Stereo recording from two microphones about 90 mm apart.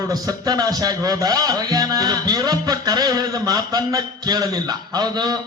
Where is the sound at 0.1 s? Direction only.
45° right (ahead or behind).